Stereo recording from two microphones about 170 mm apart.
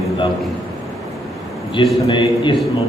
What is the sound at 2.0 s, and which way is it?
Speech, 25° left (ahead or behind).